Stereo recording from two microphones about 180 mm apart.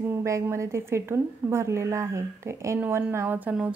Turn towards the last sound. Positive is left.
turn(degrees=-10)  # may be behind; listen again after turning